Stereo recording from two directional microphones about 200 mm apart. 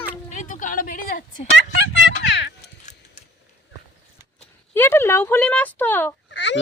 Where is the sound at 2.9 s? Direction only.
35° left (ahead or behind).